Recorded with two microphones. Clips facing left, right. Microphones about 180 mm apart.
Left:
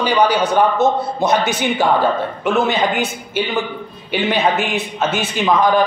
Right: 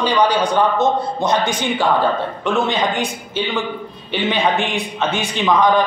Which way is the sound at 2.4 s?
5° left (ahead or behind).